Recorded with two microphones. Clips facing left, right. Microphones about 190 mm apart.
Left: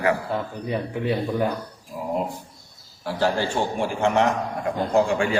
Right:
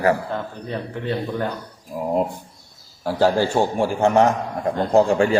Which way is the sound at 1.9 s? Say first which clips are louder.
Right 5 dB; 45° right (ahead or behind).